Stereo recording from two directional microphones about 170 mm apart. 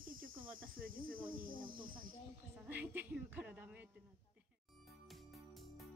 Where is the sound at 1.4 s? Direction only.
55° right (ahead or behind).